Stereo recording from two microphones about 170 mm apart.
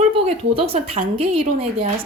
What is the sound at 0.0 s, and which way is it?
Speech, 35° right (ahead or behind).